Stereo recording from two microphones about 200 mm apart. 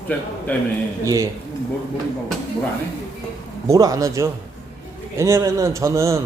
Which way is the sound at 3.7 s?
15° right (ahead or behind).